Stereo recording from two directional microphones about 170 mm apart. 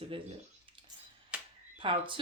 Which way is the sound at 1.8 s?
30° right (ahead or behind).